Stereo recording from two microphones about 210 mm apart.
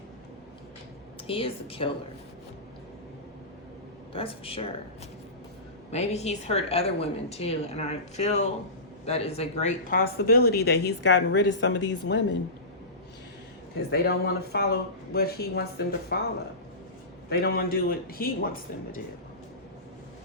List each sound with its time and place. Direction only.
1.3 s a woman's voice: 25° left (ahead or behind)
4.1 s a woman's voice: 25° left (ahead or behind)
5.9 s speech: 30° left (ahead or behind); by 12.4 s 55° left (ahead or behind)
13.9 s speech: 50° left (ahead or behind)
17.2 s speech: 50° left (ahead or behind)